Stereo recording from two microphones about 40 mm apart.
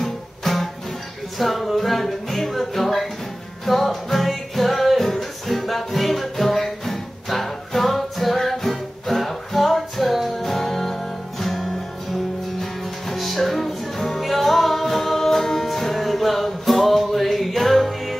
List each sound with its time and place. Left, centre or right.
0.0 s music: centre